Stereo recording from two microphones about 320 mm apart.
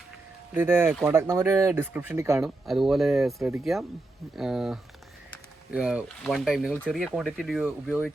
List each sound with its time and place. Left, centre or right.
0.5 s speech: centre